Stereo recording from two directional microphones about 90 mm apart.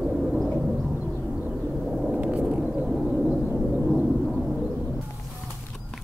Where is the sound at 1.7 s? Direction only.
Centre (ahead or behind).